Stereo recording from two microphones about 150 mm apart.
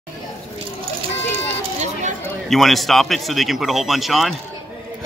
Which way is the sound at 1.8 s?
55° right (ahead or behind).